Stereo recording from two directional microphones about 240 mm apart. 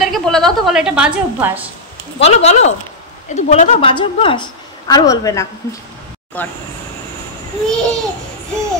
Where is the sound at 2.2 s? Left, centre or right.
Left; by 6.5 s centre.